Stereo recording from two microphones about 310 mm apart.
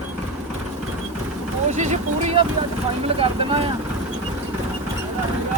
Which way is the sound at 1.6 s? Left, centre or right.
Right.